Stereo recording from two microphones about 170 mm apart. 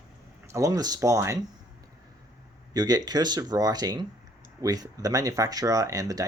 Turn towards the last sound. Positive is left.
turn(degrees=-20)  # may be behind; listen again after turning